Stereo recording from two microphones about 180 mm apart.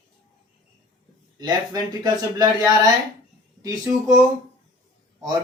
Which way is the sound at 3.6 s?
20° right (ahead or behind).